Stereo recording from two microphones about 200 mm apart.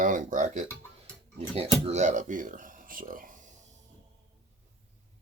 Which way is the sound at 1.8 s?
35° right (ahead or behind).